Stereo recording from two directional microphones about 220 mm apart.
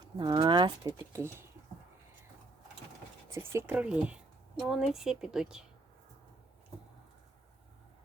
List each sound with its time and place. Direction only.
0.0 s speech: 20° right (ahead or behind)
3.3 s speech: 10° right (ahead or behind)